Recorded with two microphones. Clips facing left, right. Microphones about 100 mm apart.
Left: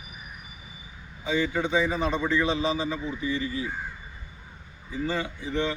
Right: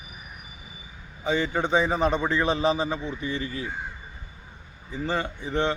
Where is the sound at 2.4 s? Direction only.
55° right (ahead or behind).